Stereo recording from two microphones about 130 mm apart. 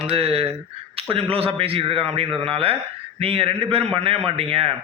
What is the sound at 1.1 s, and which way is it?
A man's voice, 45° right (ahead or behind).